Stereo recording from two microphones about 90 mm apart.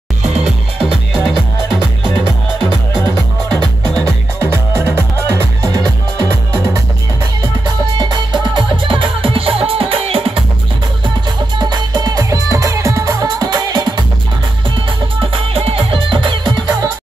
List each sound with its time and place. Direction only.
4.4 s music: 30° right (ahead or behind)
8.0 s music: 55° right (ahead or behind); by 10.4 s 90° right
11.5 s music: 50° right (ahead or behind)
15.1 s music: 80° right; by 16.7 s 55° right (ahead or behind)